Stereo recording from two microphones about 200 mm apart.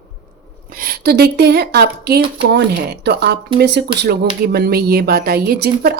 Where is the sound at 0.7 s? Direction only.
50° right (ahead or behind).